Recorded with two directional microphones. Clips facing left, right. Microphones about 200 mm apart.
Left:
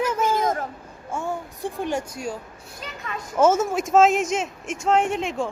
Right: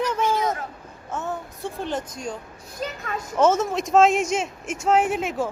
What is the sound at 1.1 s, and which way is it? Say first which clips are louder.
A woman's voice: left 1 dB; 10° left (ahead or behind).